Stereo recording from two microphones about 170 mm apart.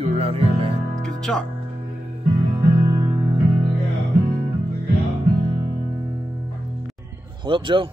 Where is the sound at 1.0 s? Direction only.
5° left (ahead or behind).